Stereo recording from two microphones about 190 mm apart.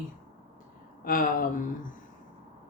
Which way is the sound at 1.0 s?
50° left (ahead or behind).